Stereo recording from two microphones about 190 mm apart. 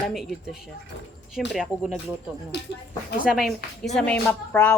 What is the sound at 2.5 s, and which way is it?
Speech, 65° left (ahead or behind).